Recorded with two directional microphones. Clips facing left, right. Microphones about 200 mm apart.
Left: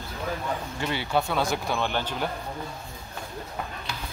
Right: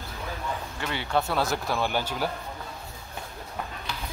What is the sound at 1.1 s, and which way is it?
Speech, centre (ahead or behind).